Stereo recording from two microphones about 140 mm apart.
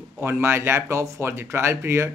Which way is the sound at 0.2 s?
20° right (ahead or behind).